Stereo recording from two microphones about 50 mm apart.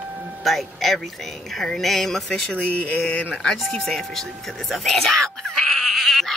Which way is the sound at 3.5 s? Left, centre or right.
Centre.